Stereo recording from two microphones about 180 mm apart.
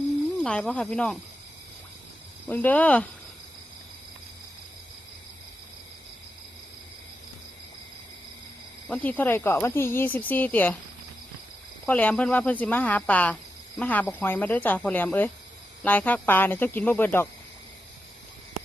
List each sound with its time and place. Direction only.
0.4 s speech: 5° left (ahead or behind)
2.5 s speech: 10° left (ahead or behind)
8.9 s speech: 10° left (ahead or behind)
11.9 s speech: 10° left (ahead or behind)